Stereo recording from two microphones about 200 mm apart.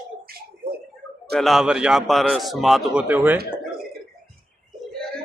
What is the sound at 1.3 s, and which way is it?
A man's voice, centre (ahead or behind).